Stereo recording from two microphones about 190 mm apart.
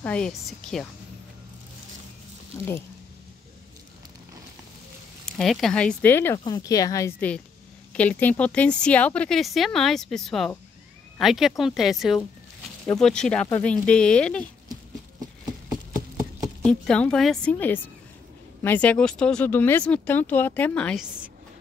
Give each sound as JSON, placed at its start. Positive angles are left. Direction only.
{"t": 0.0, "sound": "speech", "side_deg": 5}
{"t": 5.2, "sound": "speech", "side_deg": 0}
{"t": 16.6, "sound": "speech", "side_deg": 5}